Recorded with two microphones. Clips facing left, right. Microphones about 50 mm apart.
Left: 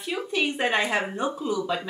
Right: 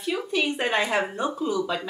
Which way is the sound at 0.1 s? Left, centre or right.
Centre.